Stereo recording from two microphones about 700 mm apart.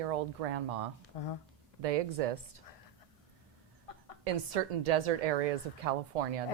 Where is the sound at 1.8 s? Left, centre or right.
Right.